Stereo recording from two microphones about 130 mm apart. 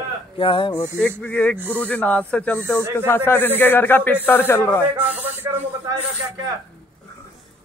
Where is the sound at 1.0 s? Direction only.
5° left (ahead or behind).